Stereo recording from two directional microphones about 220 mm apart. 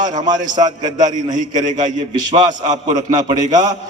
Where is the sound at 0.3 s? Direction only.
35° right (ahead or behind).